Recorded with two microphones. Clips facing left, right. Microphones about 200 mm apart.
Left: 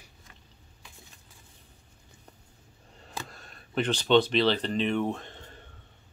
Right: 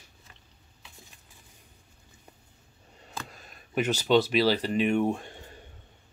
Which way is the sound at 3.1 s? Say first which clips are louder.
Left 1 dB; 10° right (ahead or behind).